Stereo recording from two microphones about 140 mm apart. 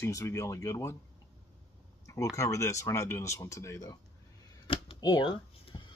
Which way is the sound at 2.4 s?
20° left (ahead or behind).